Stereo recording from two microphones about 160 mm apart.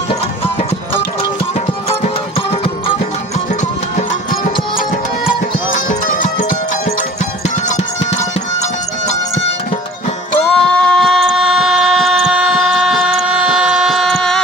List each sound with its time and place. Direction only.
1.9 s music: 35° left (ahead or behind)
4.1 s music: 60° left (ahead or behind)
10.4 s vehicle: 5° left (ahead or behind)